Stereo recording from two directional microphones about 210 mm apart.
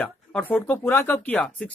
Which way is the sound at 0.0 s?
5° left (ahead or behind).